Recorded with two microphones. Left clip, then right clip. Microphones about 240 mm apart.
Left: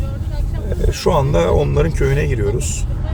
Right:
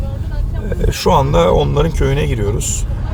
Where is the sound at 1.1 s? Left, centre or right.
Right.